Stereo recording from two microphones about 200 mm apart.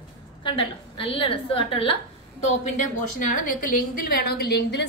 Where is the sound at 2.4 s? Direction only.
40° left (ahead or behind); by 4.8 s 55° left (ahead or behind).